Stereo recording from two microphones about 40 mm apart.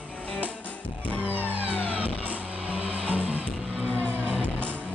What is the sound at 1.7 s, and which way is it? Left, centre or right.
Music, left.